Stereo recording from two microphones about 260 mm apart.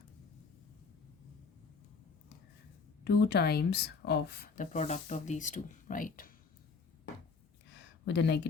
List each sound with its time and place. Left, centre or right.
3.0 s speech: left
8.0 s speech: left